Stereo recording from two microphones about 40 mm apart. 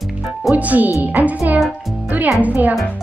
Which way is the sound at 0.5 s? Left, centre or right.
Right.